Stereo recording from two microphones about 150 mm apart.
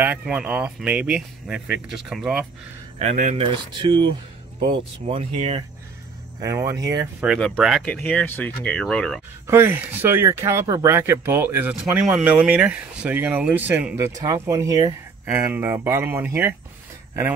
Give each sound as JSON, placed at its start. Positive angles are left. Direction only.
{"t": 0.0, "sound": "speech", "side_deg": -10}
{"t": 3.0, "sound": "speech", "side_deg": -50}
{"t": 3.3, "sound": "speech", "side_deg": -35}
{"t": 6.4, "sound": "speech", "side_deg": -20}
{"t": 7.3, "sound": "speech", "side_deg": 0}
{"t": 9.5, "sound": "speech", "side_deg": -15}
{"t": 13.9, "sound": "speech", "side_deg": -20}